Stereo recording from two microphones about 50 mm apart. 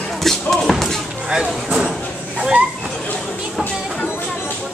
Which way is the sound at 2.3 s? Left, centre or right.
Right.